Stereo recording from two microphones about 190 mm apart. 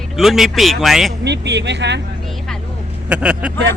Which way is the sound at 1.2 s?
65° right (ahead or behind).